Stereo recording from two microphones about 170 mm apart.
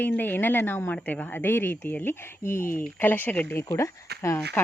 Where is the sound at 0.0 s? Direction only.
10° left (ahead or behind).